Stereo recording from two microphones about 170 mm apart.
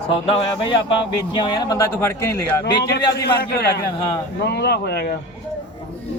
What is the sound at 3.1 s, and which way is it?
Speech, 70° left (ahead or behind).